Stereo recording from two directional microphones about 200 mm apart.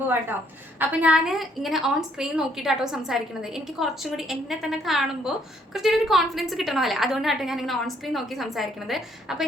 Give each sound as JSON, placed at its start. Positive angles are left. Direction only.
{"t": 0.8, "sound": "a woman's voice", "side_deg": -5}